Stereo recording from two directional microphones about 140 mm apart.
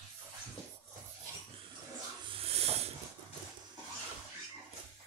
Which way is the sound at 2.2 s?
45° right (ahead or behind).